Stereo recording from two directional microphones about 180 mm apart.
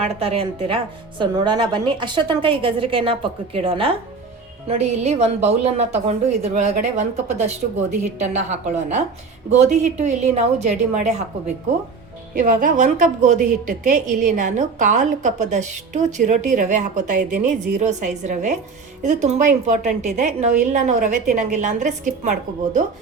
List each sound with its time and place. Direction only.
0.0 s a woman's voice: 30° right (ahead or behind)